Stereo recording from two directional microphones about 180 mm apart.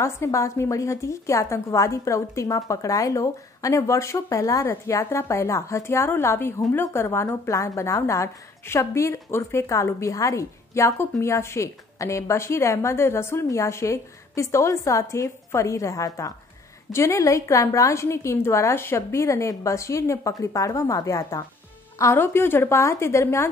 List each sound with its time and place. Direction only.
0.0 s a woman's voice: 15° left (ahead or behind)